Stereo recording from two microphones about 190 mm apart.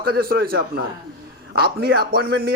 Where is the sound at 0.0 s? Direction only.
55° right (ahead or behind).